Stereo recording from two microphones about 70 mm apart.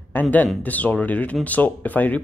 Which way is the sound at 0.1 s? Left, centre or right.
Left.